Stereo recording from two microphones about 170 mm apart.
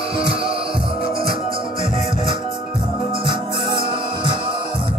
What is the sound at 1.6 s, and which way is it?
Music, 30° right (ahead or behind).